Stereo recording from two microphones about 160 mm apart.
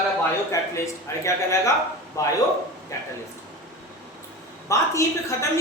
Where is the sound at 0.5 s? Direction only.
20° left (ahead or behind).